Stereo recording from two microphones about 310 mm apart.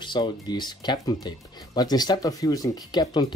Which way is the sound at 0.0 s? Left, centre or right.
Centre.